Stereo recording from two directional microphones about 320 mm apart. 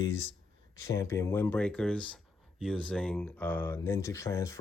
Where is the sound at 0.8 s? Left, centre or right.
Centre.